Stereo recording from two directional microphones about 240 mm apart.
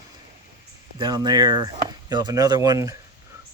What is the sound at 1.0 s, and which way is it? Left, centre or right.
Speech, centre.